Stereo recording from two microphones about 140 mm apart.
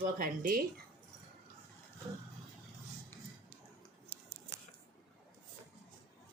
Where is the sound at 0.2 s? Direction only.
90° right.